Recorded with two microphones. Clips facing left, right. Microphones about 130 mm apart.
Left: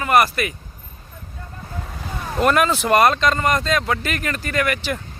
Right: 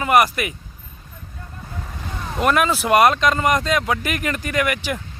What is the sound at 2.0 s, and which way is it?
Speech, 5° left (ahead or behind).